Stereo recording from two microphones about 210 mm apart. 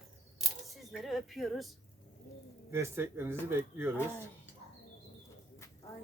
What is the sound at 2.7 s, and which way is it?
Speech, 10° right (ahead or behind).